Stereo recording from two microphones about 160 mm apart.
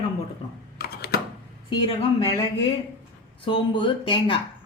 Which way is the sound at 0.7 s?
80° left.